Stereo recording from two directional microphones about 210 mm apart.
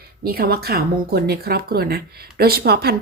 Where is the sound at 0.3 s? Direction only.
45° right (ahead or behind).